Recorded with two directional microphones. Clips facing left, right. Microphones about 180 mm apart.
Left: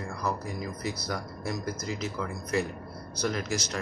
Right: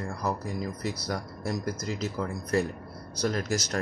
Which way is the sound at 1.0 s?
35° right (ahead or behind).